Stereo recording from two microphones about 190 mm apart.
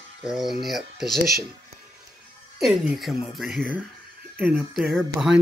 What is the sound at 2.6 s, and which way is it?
Speech, centre (ahead or behind).